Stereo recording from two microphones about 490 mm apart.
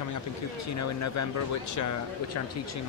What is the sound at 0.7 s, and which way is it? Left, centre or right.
Speech, left.